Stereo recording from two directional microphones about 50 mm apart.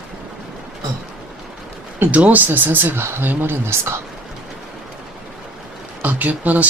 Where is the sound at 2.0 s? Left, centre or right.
Right.